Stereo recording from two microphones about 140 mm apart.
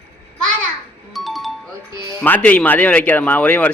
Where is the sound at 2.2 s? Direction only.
10° left (ahead or behind).